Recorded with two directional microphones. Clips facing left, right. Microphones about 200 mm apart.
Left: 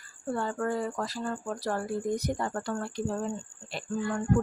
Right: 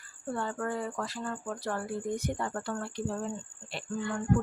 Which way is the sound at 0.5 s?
40° left (ahead or behind).